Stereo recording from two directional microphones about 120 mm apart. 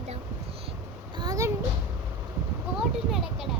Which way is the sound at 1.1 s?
30° right (ahead or behind).